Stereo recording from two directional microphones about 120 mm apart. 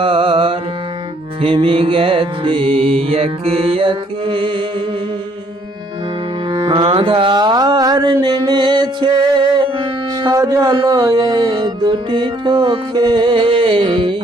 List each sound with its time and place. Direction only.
0.0 s music: 45° right (ahead or behind)
6.5 s music: 45° right (ahead or behind)
10.3 s speech: 25° right (ahead or behind)
10.8 s music: 30° right (ahead or behind)